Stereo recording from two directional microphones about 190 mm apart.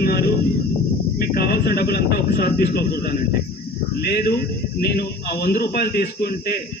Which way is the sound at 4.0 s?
55° left (ahead or behind).